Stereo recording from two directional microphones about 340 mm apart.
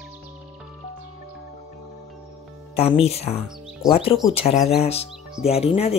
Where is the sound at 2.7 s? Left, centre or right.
Centre.